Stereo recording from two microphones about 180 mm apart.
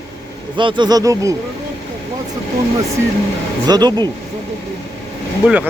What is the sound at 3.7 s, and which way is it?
Speech, 25° right (ahead or behind).